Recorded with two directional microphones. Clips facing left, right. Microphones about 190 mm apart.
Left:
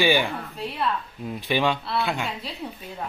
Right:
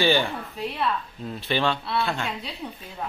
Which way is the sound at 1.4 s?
15° left (ahead or behind).